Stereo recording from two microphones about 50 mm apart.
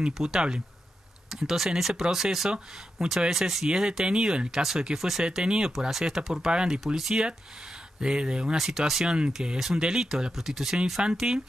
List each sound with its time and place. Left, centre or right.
0.0 s speech: centre
8.5 s speech: centre